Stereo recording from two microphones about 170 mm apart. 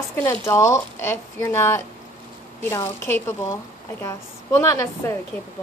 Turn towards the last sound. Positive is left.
turn(degrees=20)  # may be behind; listen again after turning